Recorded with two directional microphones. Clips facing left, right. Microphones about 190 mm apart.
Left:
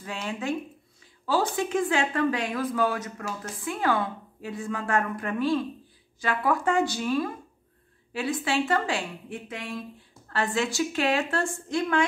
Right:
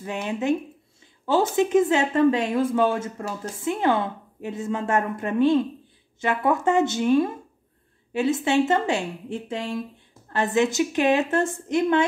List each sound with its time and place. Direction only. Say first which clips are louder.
0.0 s speech: right 6 dB; 20° right (ahead or behind)